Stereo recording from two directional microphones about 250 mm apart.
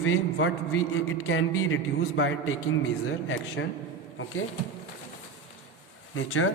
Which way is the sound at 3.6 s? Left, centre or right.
Left.